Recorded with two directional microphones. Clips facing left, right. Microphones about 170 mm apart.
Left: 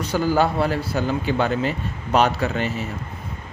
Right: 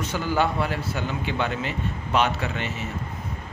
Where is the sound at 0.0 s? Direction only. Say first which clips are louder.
Left 5 dB; 35° left (ahead or behind).